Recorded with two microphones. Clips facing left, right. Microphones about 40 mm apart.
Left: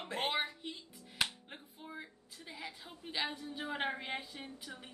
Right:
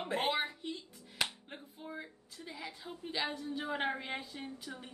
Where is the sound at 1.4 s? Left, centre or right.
Centre.